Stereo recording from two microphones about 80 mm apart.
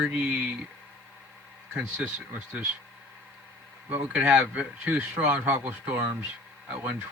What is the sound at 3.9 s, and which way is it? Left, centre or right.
A man's voice, centre.